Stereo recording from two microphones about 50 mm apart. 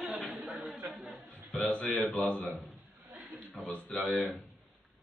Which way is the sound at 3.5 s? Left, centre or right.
Left.